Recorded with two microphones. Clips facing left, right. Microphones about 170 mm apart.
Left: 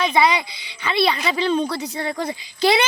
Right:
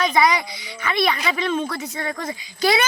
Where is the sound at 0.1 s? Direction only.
25° left (ahead or behind).